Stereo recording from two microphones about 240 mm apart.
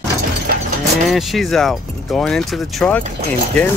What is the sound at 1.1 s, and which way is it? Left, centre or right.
Speech, centre.